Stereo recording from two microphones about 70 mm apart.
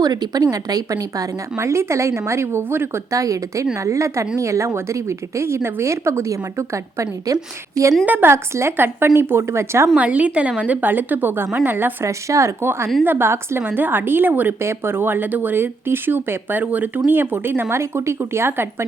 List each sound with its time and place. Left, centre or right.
0.0 s speech: right
3.2 s speech: right
8.0 s a woman's voice: right
8.3 s speech: right
9.9 s a woman's voice: right
12.0 s speech: right
13.1 s a woman's voice: right